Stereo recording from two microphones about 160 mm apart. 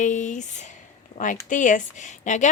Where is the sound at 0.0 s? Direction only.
50° left (ahead or behind).